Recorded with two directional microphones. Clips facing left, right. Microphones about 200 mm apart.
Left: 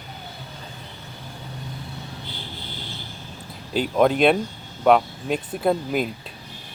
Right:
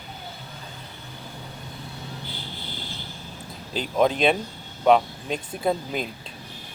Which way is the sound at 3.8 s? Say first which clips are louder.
Left 3 dB; 5° left (ahead or behind).